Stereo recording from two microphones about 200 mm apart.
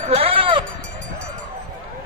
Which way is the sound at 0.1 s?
30° right (ahead or behind).